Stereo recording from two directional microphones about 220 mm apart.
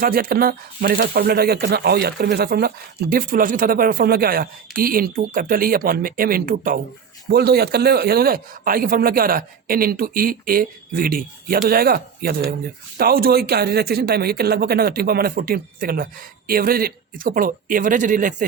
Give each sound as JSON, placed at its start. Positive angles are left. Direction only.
{"t": 0.0, "sound": "a man's voice", "side_deg": -40}